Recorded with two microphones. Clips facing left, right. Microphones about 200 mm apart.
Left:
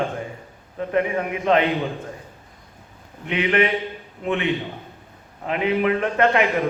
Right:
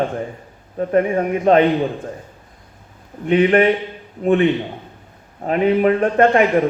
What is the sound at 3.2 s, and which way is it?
A man's voice, 45° right (ahead or behind).